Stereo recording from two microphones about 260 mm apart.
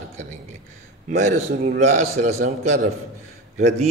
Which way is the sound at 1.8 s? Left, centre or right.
Right.